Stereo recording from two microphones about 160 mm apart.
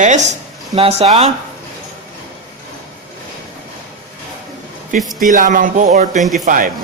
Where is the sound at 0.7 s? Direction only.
40° right (ahead or behind).